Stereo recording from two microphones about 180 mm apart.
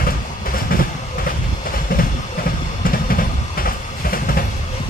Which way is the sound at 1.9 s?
55° left (ahead or behind).